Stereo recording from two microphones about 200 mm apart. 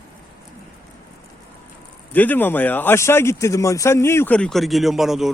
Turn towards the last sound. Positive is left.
turn(degrees=0)  # may be behind; listen again after turning